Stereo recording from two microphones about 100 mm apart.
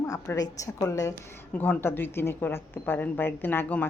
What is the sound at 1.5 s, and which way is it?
A woman's voice, 20° left (ahead or behind).